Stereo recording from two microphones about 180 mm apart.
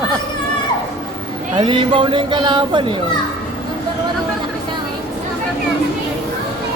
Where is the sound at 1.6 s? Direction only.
25° right (ahead or behind).